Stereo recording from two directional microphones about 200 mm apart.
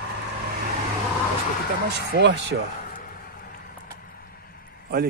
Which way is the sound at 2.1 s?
60° right (ahead or behind).